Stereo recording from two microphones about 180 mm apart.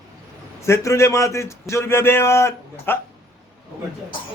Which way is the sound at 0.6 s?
15° left (ahead or behind).